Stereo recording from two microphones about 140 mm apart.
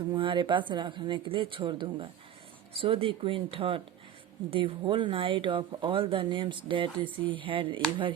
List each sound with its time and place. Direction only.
0.1 s speech: 35° right (ahead or behind)